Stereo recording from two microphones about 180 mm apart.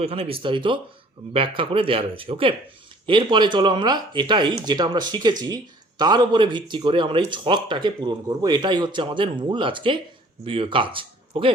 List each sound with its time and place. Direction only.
0.0 s speech: 35° right (ahead or behind)